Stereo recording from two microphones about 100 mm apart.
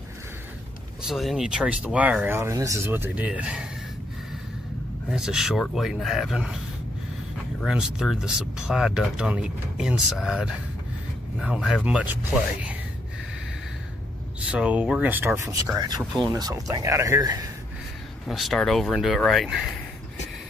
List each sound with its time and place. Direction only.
1.0 s speech: centre (ahead or behind); by 2.9 s 35° right (ahead or behind)
2.9 s speech: 20° right (ahead or behind)
5.1 s speech: 5° right (ahead or behind)
7.6 s speech: 5° right (ahead or behind)
14.5 s speech: 15° right (ahead or behind); by 17.5 s 35° right (ahead or behind)
18.2 s speech: centre (ahead or behind)